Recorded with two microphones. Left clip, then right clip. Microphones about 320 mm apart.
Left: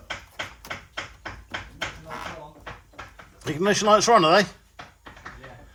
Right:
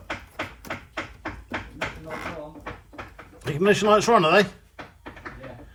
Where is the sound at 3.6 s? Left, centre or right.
Centre.